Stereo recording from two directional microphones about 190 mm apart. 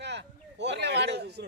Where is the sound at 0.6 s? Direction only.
65° right (ahead or behind).